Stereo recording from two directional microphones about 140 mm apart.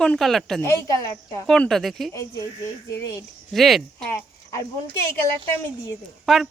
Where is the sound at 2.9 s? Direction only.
25° left (ahead or behind).